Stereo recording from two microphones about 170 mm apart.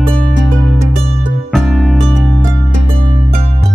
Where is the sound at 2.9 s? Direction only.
35° right (ahead or behind).